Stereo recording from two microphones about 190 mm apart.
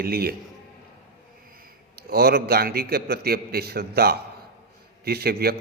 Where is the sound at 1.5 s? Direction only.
50° right (ahead or behind).